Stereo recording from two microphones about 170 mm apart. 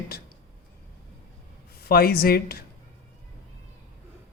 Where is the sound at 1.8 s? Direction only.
65° left (ahead or behind).